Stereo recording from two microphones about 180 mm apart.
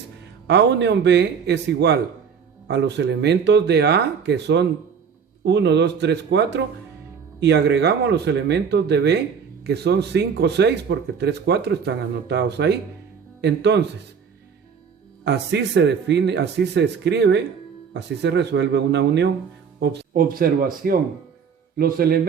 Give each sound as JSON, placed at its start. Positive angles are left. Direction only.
{"t": 0.4, "sound": "speech", "side_deg": -70}
{"t": 15.2, "sound": "speech", "side_deg": -70}